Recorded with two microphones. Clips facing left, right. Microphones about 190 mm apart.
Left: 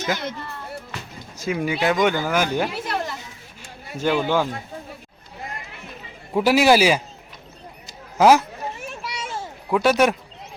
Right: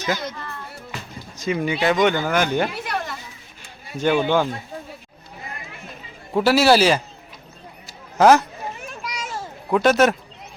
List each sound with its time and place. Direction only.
1.4 s speech: 5° left (ahead or behind)
6.3 s a man's voice: 15° left (ahead or behind)
8.2 s speech: 5° left (ahead or behind)
9.0 s children playing: 30° left (ahead or behind)
9.4 s a sound: 5° left (ahead or behind)